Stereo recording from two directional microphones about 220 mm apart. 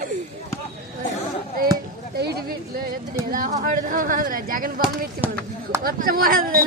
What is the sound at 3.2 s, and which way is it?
Speech, 40° right (ahead or behind).